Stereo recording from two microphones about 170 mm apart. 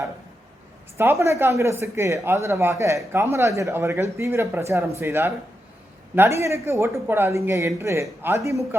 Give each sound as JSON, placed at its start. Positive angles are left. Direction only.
{"t": 0.9, "sound": "speech", "side_deg": -15}